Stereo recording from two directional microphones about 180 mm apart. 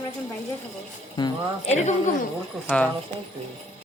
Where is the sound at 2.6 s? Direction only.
5° left (ahead or behind).